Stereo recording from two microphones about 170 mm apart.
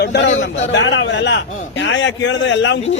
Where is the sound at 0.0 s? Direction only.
80° left.